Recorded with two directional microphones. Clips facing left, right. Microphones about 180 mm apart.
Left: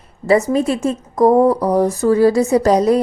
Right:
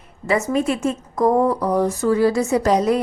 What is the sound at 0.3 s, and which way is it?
A woman's voice, 35° left (ahead or behind).